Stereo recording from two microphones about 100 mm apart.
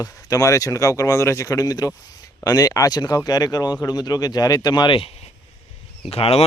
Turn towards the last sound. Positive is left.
turn(degrees=85)